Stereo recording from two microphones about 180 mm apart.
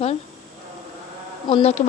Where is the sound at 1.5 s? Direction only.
35° left (ahead or behind).